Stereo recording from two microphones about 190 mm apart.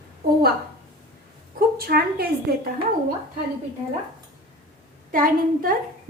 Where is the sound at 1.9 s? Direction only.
55° right (ahead or behind).